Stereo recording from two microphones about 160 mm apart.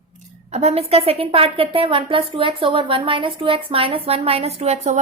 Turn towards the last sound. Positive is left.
turn(degrees=-45)  # may be behind; listen again after turning